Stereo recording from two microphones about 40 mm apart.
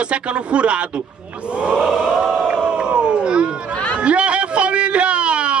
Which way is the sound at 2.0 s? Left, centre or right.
Centre.